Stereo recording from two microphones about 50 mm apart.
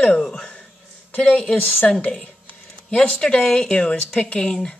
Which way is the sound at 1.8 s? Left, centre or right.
Centre.